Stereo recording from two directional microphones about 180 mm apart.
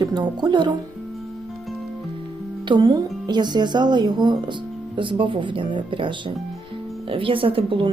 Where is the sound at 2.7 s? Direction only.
25° right (ahead or behind).